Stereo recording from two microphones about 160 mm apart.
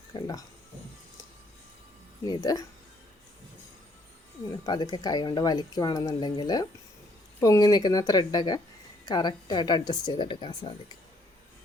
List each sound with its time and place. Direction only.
0.1 s speech: 20° left (ahead or behind)
2.2 s speech: 25° left (ahead or behind)
4.6 s speech: 25° left (ahead or behind)